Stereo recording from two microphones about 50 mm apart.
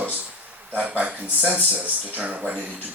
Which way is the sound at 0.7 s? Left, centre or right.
Right.